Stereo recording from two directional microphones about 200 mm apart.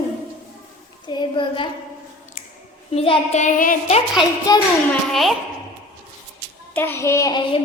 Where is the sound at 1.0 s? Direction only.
20° left (ahead or behind).